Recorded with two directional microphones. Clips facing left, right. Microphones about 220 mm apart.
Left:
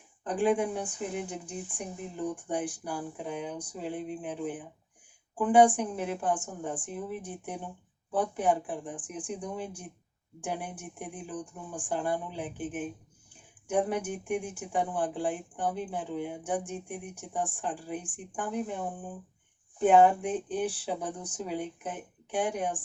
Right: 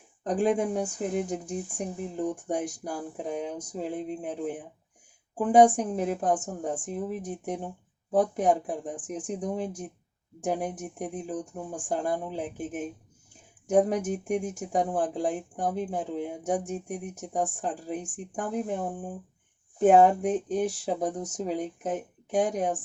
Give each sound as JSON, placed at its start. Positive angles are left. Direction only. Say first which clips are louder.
{"t": 0.3, "sound": "speech", "louder": "right 2 dB", "side_deg": -40}